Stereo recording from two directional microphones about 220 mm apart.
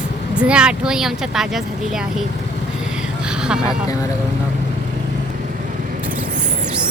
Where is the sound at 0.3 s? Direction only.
5° right (ahead or behind).